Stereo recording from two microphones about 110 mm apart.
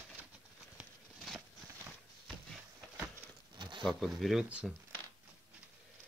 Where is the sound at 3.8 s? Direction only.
Centre (ahead or behind).